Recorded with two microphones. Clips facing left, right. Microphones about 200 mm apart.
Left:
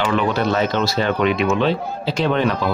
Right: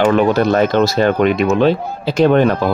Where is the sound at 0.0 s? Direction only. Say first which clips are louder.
Right 7 dB; 45° right (ahead or behind).